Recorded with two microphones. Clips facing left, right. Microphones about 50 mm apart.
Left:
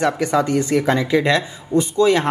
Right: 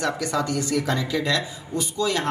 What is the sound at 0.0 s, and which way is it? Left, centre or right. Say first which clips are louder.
A woman's voice: left 7 dB; left.